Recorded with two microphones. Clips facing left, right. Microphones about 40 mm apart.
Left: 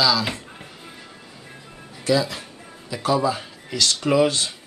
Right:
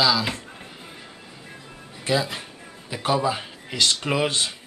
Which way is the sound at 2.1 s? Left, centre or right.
Right.